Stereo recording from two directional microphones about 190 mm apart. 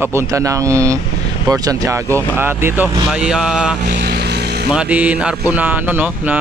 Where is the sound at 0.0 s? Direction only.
15° right (ahead or behind).